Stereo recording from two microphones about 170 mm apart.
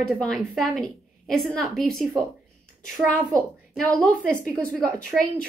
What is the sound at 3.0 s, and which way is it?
Speech, 10° right (ahead or behind).